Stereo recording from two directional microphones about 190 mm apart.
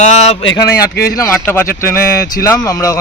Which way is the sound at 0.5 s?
20° left (ahead or behind).